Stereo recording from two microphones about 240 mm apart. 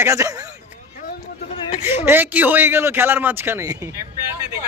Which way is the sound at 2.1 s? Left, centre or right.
Centre.